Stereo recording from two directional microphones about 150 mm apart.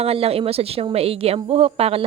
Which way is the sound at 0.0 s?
40° right (ahead or behind).